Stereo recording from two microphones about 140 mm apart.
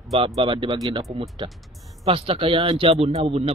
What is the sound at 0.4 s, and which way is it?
Speech, 40° right (ahead or behind).